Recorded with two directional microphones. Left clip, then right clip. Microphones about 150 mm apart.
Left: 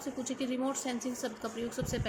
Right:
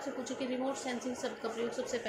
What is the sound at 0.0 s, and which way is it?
Speech, 55° left (ahead or behind).